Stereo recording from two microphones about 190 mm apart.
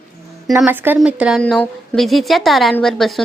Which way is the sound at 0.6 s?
10° right (ahead or behind).